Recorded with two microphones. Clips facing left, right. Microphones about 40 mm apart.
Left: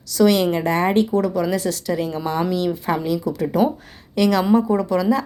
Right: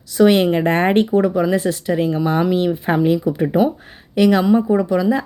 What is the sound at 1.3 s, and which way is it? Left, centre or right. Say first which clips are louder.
Speech: right 4 dB; right.